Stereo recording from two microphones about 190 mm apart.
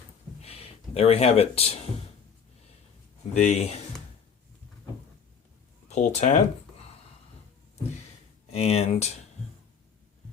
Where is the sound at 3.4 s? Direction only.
40° left (ahead or behind).